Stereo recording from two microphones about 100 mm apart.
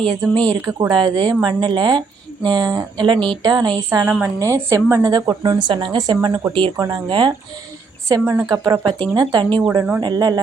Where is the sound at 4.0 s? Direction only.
20° right (ahead or behind).